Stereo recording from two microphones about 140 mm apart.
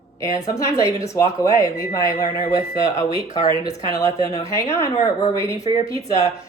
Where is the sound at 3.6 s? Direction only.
25° left (ahead or behind).